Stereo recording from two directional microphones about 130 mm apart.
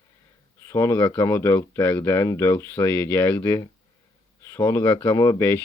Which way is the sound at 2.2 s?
25° left (ahead or behind).